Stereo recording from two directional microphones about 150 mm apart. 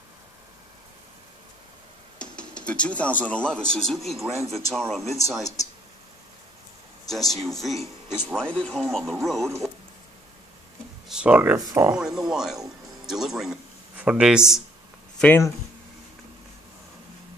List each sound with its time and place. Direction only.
2.1 s speech: 5° left (ahead or behind)
4.4 s speech: 45° right (ahead or behind)
4.6 s speech: centre (ahead or behind)
7.3 s speech: centre (ahead or behind)
8.4 s speech: 5° left (ahead or behind)
11.1 s speech: 10° right (ahead or behind)
15.1 s speech: 10° left (ahead or behind)